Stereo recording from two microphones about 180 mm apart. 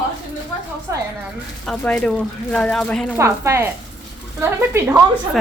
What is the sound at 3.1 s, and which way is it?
Speech, 15° right (ahead or behind).